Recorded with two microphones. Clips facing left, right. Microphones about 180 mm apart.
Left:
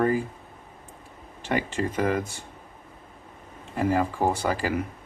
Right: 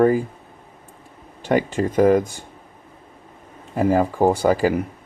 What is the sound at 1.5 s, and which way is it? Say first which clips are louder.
Speech: right 7 dB; 45° right (ahead or behind).